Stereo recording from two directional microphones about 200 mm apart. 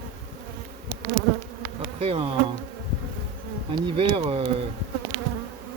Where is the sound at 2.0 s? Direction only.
25° right (ahead or behind).